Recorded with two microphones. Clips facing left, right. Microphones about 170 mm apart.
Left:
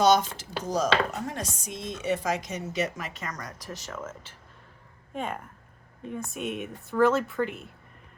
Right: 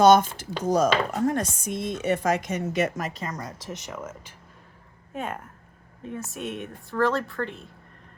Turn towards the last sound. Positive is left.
turn(degrees=5)  # may be behind; listen again after turning